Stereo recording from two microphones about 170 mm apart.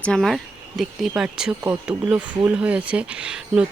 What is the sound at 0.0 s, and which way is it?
Speech, 5° left (ahead or behind).